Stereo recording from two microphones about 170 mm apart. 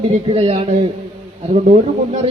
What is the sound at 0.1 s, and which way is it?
Speech, 35° right (ahead or behind).